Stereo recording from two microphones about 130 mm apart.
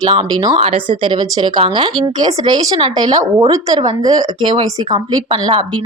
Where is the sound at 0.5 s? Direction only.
55° right (ahead or behind).